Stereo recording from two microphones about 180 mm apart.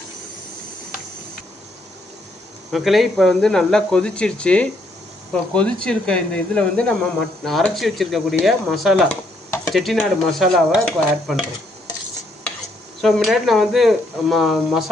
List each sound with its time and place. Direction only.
2.7 s speech: centre (ahead or behind)
13.0 s speech: centre (ahead or behind)